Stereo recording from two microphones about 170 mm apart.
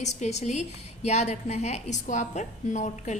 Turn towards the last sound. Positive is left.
turn(degrees=45)  # may be behind; listen again after turning